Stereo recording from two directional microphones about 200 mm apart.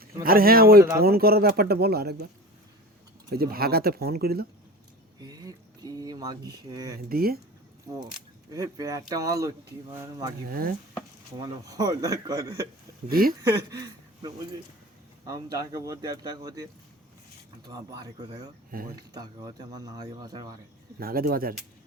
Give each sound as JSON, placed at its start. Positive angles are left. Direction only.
{"t": 0.0, "sound": "speech", "side_deg": -45}
{"t": 3.3, "sound": "speech", "side_deg": -50}
{"t": 5.2, "sound": "a sound", "side_deg": -20}
{"t": 6.7, "sound": "speech", "side_deg": -15}
{"t": 7.1, "sound": "speech", "side_deg": -50}
{"t": 7.9, "sound": "speech", "side_deg": -20}
{"t": 10.5, "sound": "speech", "side_deg": -50}
{"t": 11.3, "sound": "speech", "side_deg": -20}
{"t": 13.1, "sound": "speech", "side_deg": -45}
{"t": 13.4, "sound": "speech", "side_deg": -15}
{"t": 17.7, "sound": "speech", "side_deg": -20}
{"t": 18.7, "sound": "speech", "side_deg": -45}
{"t": 19.1, "sound": "speech", "side_deg": -20}
{"t": 21.0, "sound": "speech", "side_deg": -45}